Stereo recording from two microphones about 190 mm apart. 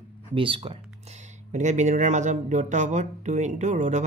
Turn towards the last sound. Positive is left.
turn(degrees=-40)  # may be behind; listen again after turning